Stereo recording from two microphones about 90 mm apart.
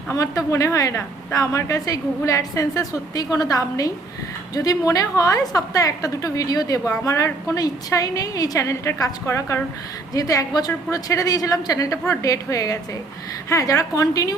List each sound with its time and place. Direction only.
0.1 s a woman's voice: 35° left (ahead or behind)